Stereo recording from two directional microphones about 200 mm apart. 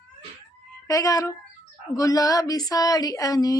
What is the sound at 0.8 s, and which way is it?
Speech, 15° left (ahead or behind).